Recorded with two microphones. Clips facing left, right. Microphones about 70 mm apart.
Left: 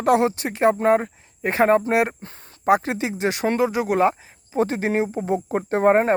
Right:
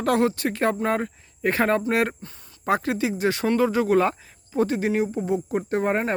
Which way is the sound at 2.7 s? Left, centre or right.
Left.